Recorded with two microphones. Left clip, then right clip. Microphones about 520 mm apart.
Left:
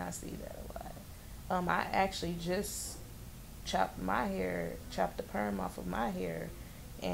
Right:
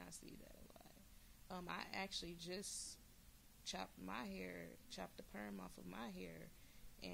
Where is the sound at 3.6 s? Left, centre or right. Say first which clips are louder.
Left 17 dB; right.